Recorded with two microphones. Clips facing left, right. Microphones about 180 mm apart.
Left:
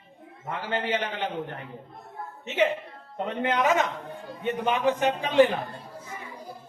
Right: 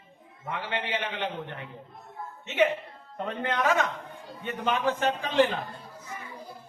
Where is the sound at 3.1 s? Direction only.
20° left (ahead or behind).